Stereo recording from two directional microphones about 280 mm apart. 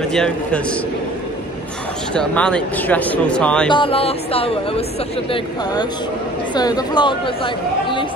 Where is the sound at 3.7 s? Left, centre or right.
Centre.